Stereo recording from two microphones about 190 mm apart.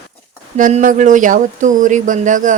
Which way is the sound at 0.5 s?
40° right (ahead or behind).